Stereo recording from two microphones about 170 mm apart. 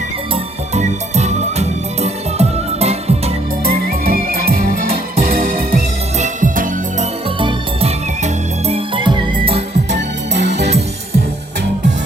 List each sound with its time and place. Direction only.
0.7 s music: 40° right (ahead or behind)
6.1 s music: 45° right (ahead or behind)
7.3 s music: 30° right (ahead or behind)
9.9 s music: 90° right